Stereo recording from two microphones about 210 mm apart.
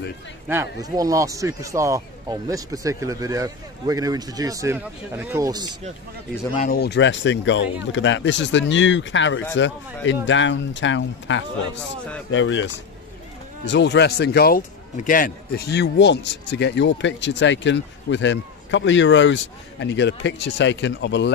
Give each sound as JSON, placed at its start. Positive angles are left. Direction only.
{"t": 0.5, "sound": "speech", "side_deg": -15}
{"t": 6.5, "sound": "a man's voice", "side_deg": 40}